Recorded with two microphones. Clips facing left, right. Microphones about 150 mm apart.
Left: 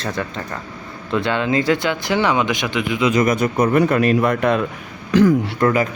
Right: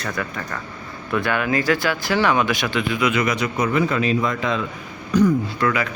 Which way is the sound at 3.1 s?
45° left (ahead or behind).